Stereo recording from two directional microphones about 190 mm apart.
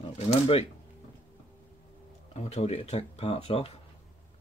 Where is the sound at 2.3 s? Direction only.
35° left (ahead or behind).